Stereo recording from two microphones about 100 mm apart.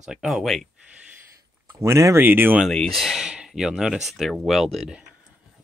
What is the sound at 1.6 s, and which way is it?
Speech, 30° right (ahead or behind).